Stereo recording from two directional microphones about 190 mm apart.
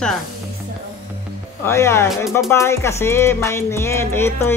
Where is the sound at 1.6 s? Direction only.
15° left (ahead or behind).